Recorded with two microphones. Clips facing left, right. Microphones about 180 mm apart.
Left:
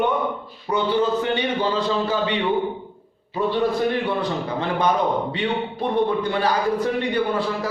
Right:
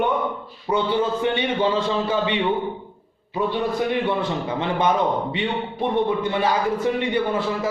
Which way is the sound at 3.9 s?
20° right (ahead or behind).